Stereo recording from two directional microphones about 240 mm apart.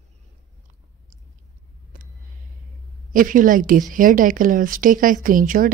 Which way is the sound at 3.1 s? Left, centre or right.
Right.